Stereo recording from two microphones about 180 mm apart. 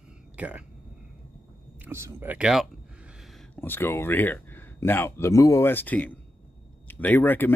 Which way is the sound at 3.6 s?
10° left (ahead or behind).